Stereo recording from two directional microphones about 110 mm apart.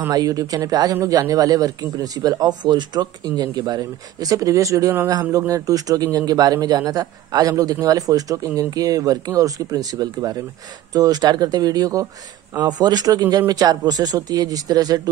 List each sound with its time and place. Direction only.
0.1 s speech: 35° right (ahead or behind)